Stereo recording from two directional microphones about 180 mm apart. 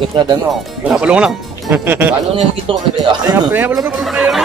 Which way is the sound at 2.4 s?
30° right (ahead or behind).